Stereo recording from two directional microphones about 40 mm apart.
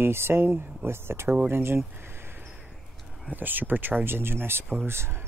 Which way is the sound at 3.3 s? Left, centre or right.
Right.